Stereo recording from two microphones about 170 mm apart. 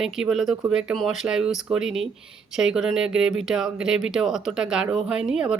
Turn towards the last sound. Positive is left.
turn(degrees=-5)  # may be behind; listen again after turning